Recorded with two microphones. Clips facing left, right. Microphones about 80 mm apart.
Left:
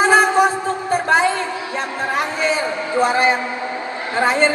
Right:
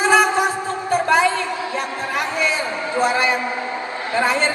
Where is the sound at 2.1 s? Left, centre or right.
Left.